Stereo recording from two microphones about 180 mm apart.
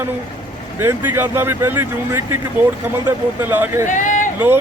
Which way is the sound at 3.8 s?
45° left (ahead or behind).